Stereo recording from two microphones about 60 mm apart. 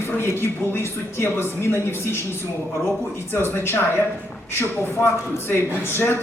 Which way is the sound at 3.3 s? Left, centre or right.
Left.